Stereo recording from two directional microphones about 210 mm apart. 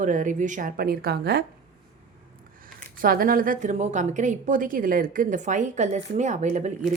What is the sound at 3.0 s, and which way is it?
A woman's voice, 45° right (ahead or behind).